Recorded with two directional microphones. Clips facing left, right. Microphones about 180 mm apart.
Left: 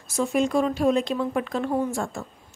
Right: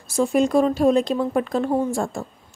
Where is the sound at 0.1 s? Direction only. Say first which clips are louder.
Right 4 dB; 35° right (ahead or behind).